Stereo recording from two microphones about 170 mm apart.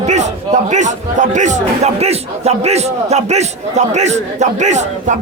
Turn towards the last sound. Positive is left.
turn(degrees=-45)  # may be behind; listen again after turning